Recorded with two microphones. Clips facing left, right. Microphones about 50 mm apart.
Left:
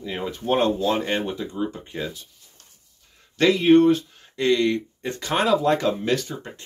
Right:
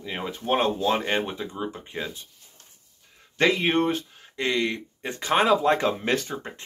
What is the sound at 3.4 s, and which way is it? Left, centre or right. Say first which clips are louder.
Speech: left 6 dB; right.